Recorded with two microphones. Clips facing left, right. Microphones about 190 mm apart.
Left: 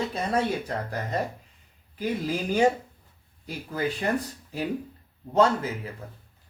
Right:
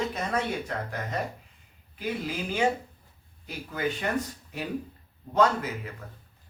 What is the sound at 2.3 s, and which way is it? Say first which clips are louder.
Speech: left 5 dB; 40° left (ahead or behind).